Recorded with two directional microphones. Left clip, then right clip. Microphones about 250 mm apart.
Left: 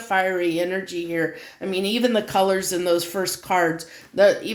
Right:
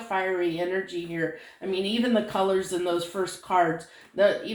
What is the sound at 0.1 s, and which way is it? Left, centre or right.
Speech, left.